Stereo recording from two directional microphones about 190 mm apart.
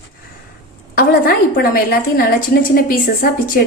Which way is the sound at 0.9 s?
50° left (ahead or behind).